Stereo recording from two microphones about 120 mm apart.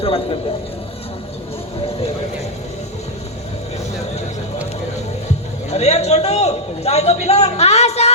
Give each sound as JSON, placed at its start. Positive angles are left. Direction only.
{"t": 0.0, "sound": "a man's voice", "side_deg": 50}
{"t": 5.7, "sound": "a man's voice", "side_deg": 65}